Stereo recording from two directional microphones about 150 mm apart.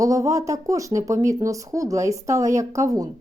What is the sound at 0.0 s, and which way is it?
Speech, 20° right (ahead or behind).